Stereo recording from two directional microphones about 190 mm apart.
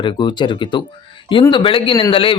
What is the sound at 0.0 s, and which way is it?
Speech, 25° left (ahead or behind).